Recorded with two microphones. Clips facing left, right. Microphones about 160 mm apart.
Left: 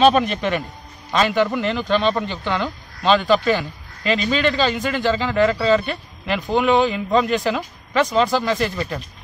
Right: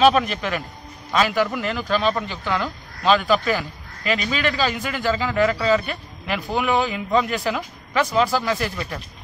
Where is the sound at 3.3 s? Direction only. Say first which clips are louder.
Left 3 dB; 5° right (ahead or behind).